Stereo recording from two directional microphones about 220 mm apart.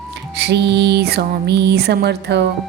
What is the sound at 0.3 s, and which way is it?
Music, 50° right (ahead or behind).